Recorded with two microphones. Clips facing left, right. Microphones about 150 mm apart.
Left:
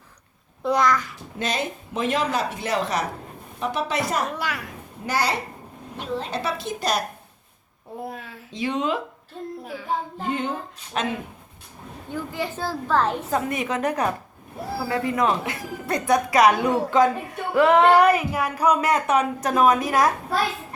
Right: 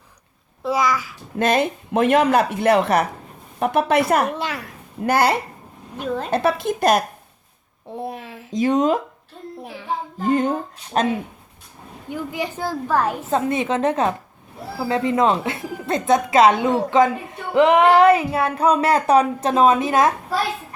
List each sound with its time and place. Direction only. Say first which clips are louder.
0.6 s a child's voice: even; 5° right (ahead or behind)
1.4 s speech: right 8 dB; 55° right (ahead or behind)
4.4 s speech: right 2 dB; 25° right (ahead or behind)
5.0 s a woman's voice: right 7 dB; 55° right (ahead or behind)
7.9 s speech: right 4 dB; 20° right (ahead or behind)
8.5 s a woman's voice: right 7 dB; 45° right (ahead or behind)
10.2 s a woman's voice: right 7 dB; 40° right (ahead or behind)
12.1 s a child's voice: right 2 dB; 15° right (ahead or behind)
13.3 s speech: right 4 dB; 25° right (ahead or behind)